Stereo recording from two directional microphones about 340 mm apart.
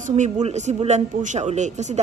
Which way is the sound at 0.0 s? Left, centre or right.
Right.